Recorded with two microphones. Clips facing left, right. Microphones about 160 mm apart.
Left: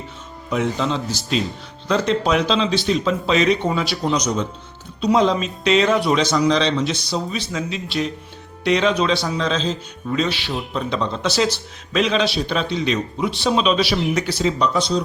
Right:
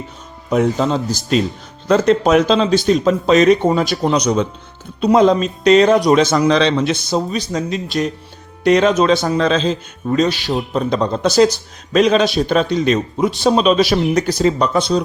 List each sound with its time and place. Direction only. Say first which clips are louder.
0.5 s a man's voice: right 6 dB; 45° right (ahead or behind); by 4.4 s 60° right (ahead or behind)
4.9 s a man's voice: right 5 dB; 50° right (ahead or behind)